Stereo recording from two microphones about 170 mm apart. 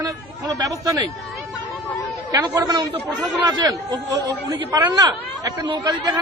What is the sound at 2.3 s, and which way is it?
A man's voice, 25° right (ahead or behind).